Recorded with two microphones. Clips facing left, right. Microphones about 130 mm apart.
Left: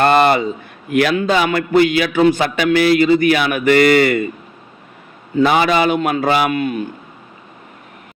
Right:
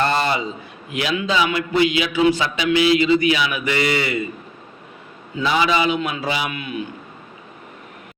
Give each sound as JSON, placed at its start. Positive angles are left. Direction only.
{"t": 0.0, "sound": "a man's voice", "side_deg": 60}
{"t": 5.4, "sound": "a man's voice", "side_deg": 55}